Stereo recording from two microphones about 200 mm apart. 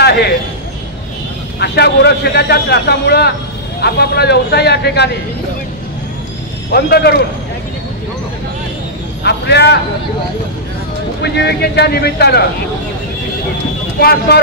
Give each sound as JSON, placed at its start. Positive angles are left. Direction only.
{"t": 0.0, "sound": "vehicle", "side_deg": 55}
{"t": 1.6, "sound": "a man's voice", "side_deg": 55}
{"t": 6.7, "sound": "speech", "side_deg": 55}
{"t": 9.2, "sound": "a man's voice", "side_deg": 55}
{"t": 11.2, "sound": "a man's voice", "side_deg": 55}
{"t": 13.9, "sound": "speech", "side_deg": 50}